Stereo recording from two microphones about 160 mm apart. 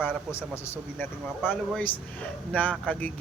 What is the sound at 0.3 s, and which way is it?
Speech, 15° left (ahead or behind).